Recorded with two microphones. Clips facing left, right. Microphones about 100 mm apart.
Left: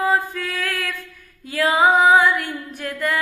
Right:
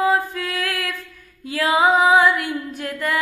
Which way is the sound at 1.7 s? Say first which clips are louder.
Even; 50° left (ahead or behind).